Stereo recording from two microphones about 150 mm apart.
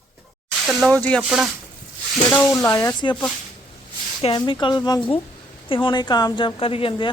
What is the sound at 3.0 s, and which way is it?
A woman's voice, 30° left (ahead or behind).